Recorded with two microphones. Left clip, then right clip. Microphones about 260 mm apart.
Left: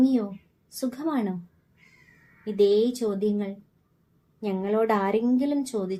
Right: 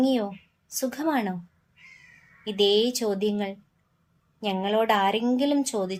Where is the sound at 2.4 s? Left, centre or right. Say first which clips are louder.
Left 1 dB; right.